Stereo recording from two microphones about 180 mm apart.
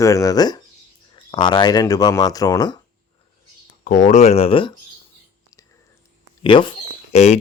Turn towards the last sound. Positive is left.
turn(degrees=35)  # may be behind; listen again after turning